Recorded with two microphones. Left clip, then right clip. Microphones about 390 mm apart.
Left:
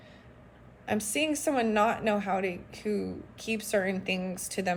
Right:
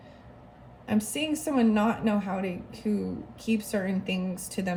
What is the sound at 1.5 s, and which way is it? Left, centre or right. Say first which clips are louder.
Speech: right 1 dB; left.